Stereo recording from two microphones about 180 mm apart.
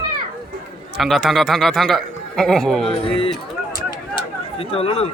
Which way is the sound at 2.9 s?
30° left (ahead or behind).